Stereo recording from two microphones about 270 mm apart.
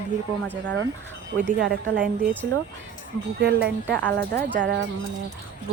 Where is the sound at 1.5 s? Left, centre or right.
Right.